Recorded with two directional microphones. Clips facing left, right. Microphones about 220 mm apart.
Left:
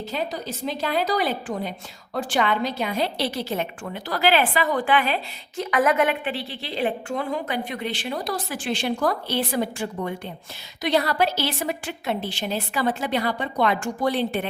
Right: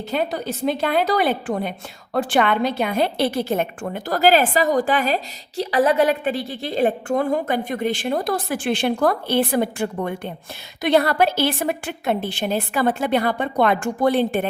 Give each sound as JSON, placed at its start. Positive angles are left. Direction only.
{"t": 0.1, "sound": "a woman's voice", "side_deg": -60}